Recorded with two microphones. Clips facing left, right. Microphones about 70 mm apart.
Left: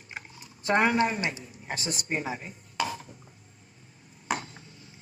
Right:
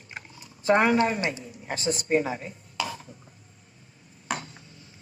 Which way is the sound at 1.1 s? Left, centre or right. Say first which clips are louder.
Right 3 dB; right.